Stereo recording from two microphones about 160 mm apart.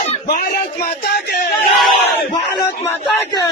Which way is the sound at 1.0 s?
75° left (ahead or behind).